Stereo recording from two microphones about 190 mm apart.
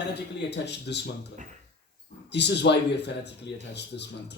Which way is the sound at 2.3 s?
65° left (ahead or behind).